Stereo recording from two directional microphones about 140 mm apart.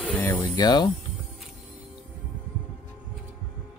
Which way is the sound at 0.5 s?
30° left (ahead or behind).